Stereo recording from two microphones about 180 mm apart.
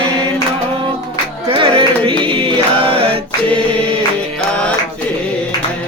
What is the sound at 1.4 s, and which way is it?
Music, 30° right (ahead or behind).